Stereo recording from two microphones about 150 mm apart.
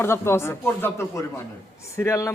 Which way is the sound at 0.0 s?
15° left (ahead or behind).